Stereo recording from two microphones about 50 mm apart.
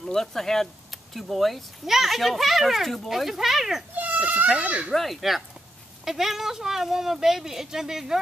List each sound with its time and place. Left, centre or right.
0.0 s speech: centre
3.9 s goat: right
4.6 s speech: right
4.9 s speech: centre